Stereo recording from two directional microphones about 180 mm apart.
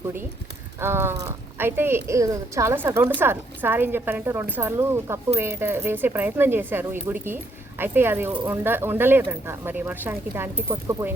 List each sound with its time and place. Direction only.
0.8 s speech: 15° right (ahead or behind)